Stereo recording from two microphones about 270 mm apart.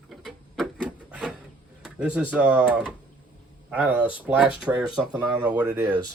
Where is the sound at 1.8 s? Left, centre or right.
Centre.